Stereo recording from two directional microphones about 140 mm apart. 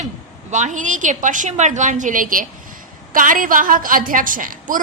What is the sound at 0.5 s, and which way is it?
A woman's voice, 60° right (ahead or behind).